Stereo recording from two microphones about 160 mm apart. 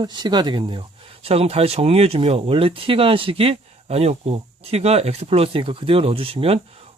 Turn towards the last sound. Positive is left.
turn(degrees=-35)  # may be behind; listen again after turning